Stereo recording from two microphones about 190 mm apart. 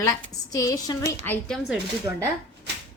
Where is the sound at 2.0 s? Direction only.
15° right (ahead or behind).